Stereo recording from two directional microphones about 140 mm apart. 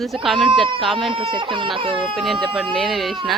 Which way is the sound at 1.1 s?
40° right (ahead or behind).